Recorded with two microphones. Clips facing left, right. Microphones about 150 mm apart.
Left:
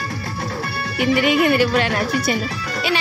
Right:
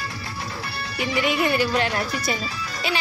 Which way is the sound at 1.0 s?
65° left (ahead or behind).